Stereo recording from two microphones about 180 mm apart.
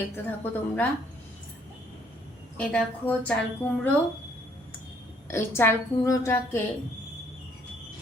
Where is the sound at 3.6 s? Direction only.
10° left (ahead or behind).